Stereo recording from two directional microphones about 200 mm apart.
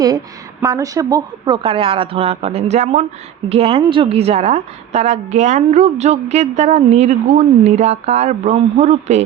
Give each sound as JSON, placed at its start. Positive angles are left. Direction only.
{"t": 0.6, "sound": "a woman's voice", "side_deg": -15}